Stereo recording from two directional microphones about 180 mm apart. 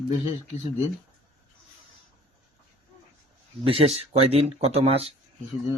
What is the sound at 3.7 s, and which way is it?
Speech, 35° right (ahead or behind).